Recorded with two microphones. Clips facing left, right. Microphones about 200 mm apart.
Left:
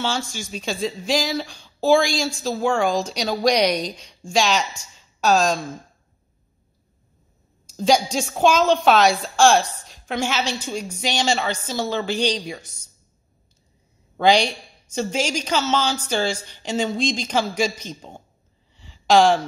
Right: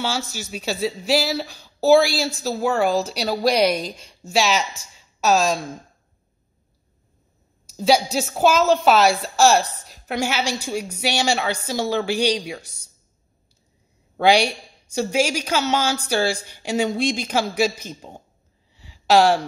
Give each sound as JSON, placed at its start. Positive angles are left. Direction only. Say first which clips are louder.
{"t": 0.3, "sound": "a woman's voice", "louder": "right 1 dB", "side_deg": -5}
{"t": 7.7, "sound": "a woman's voice", "louder": "right 1 dB", "side_deg": -5}
{"t": 14.1, "sound": "a woman's voice", "louder": "even", "side_deg": -10}
{"t": 18.8, "sound": "a sound", "louder": "even", "side_deg": -10}